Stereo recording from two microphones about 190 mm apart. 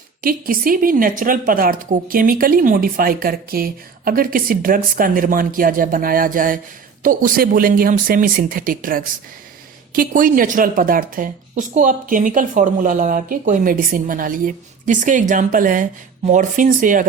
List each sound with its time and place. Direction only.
0.2 s speech: 50° right (ahead or behind)